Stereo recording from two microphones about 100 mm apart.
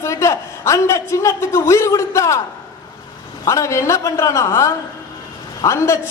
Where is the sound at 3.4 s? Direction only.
30° left (ahead or behind).